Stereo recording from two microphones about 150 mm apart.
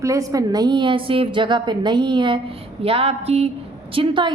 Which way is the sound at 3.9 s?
35° right (ahead or behind).